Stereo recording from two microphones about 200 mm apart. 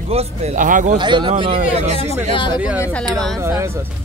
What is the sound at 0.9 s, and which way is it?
Speech, 25° right (ahead or behind).